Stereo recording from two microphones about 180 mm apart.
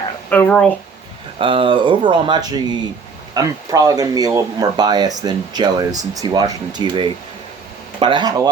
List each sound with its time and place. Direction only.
0.3 s speech: 10° left (ahead or behind)
1.4 s speech: 30° right (ahead or behind)